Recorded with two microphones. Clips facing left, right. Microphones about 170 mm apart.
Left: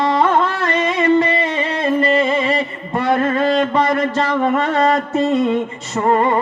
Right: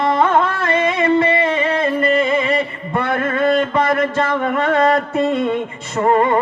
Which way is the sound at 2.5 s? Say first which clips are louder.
Even; 55° right (ahead or behind).